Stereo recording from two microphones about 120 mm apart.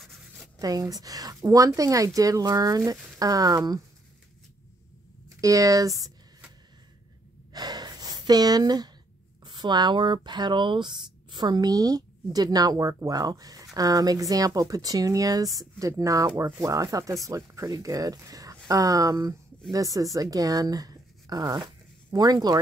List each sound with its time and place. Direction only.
0.0 s writing: centre (ahead or behind)
0.6 s speech: 30° right (ahead or behind)
5.4 s speech: 30° right (ahead or behind)
7.5 s gasp: 35° right (ahead or behind)
9.4 s speech: 40° right (ahead or behind)